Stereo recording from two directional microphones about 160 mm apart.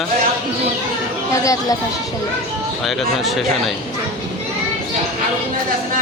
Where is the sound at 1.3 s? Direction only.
20° left (ahead or behind).